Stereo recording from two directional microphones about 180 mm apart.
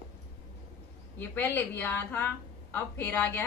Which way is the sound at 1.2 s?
10° left (ahead or behind).